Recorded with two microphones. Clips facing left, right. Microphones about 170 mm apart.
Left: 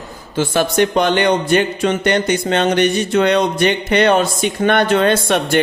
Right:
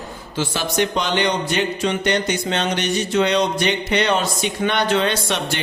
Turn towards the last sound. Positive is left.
turn(degrees=50)  # may be behind; listen again after turning